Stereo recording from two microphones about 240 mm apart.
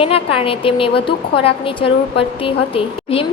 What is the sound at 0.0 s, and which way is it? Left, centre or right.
A woman's voice, left.